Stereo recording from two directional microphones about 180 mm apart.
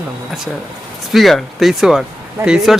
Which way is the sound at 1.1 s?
Centre (ahead or behind).